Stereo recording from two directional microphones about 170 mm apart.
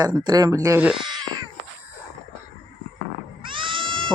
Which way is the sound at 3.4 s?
30° right (ahead or behind).